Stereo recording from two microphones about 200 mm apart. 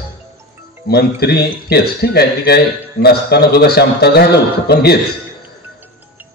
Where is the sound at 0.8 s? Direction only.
55° left (ahead or behind).